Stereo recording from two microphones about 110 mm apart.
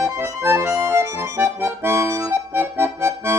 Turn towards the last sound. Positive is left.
turn(degrees=-20)  # may be behind; listen again after turning